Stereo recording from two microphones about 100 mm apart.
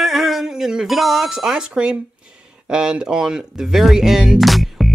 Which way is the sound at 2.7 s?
10° right (ahead or behind).